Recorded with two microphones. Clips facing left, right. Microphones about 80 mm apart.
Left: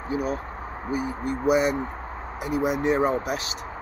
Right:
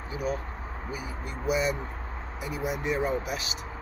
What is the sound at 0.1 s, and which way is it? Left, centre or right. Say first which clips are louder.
Speech: left 4 dB; left.